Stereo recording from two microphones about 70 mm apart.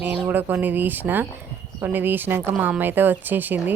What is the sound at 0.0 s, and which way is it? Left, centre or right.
A child's voice, right.